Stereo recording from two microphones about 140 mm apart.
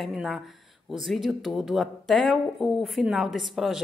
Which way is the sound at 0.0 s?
Centre (ahead or behind).